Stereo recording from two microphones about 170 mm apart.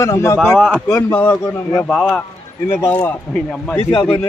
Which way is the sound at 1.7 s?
Centre (ahead or behind).